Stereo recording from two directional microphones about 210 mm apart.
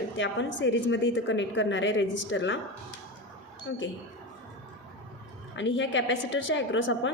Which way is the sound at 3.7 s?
60° left (ahead or behind).